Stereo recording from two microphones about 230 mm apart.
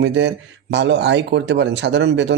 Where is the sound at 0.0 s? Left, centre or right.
Right.